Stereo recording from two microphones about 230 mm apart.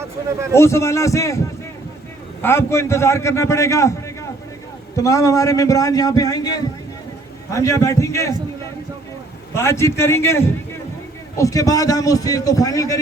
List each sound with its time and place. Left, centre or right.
0.5 s a man's voice: centre
2.4 s a man's voice: centre
9.6 s a man's voice: centre